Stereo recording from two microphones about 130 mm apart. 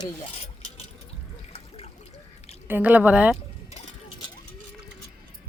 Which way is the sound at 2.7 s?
10° right (ahead or behind).